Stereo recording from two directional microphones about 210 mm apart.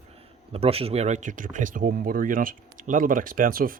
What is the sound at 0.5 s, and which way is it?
Speech, 30° right (ahead or behind).